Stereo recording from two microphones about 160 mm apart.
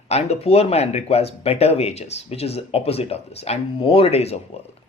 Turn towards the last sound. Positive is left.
turn(degrees=40)  # may be behind; listen again after turning